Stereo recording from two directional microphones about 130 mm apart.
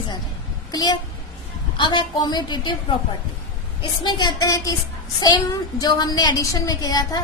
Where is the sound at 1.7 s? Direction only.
40° left (ahead or behind).